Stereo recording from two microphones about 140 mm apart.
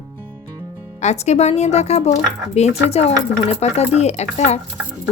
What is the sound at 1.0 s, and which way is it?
Speech, 50° left (ahead or behind).